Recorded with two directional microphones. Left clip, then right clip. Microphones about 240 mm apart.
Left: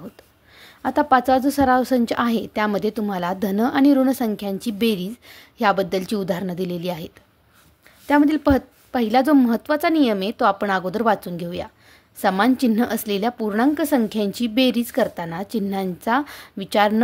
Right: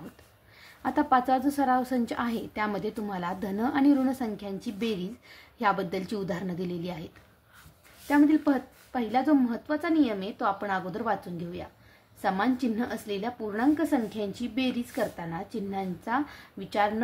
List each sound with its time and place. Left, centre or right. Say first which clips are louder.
0.6 s a woman's voice: left 7 dB; left
8.1 s a woman's voice: left 6 dB; left